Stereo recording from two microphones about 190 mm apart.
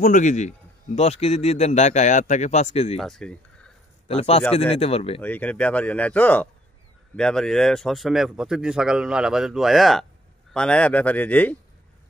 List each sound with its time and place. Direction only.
0.0 s speech: 40° left (ahead or behind)
3.0 s speech: 5° left (ahead or behind)
4.1 s speech: 30° left (ahead or behind)
5.2 s speech: 10° left (ahead or behind)